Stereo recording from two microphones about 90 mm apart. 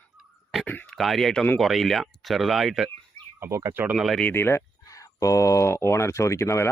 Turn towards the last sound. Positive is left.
turn(degrees=30)  # may be behind; listen again after turning